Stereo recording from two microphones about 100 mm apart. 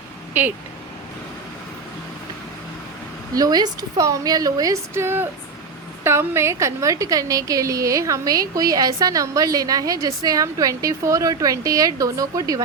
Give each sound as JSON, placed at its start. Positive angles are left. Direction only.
{"t": 3.3, "sound": "a woman's voice", "side_deg": -40}